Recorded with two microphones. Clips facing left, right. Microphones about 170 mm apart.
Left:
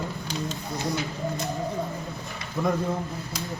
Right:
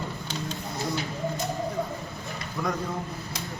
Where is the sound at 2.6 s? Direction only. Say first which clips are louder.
Left 4 dB; 20° left (ahead or behind).